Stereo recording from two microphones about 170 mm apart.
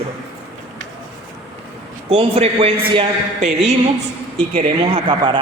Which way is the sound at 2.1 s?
35° right (ahead or behind).